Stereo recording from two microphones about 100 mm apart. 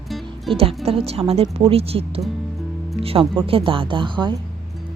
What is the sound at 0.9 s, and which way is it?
A woman's voice, 85° right.